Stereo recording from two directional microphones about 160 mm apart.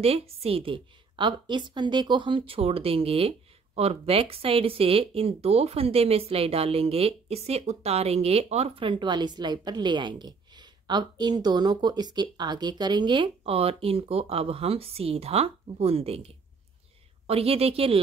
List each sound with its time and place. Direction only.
0.0 s a woman's voice: 40° right (ahead or behind)
17.3 s a woman's voice: 40° right (ahead or behind)